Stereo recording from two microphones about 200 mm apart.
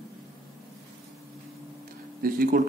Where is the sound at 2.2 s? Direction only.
45° right (ahead or behind).